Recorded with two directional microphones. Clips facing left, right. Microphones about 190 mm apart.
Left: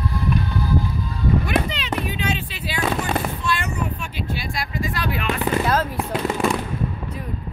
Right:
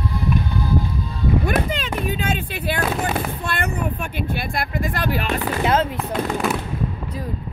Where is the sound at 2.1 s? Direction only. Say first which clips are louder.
Right 2 dB; 50° right (ahead or behind).